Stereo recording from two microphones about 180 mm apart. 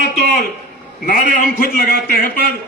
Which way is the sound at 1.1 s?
55° left (ahead or behind).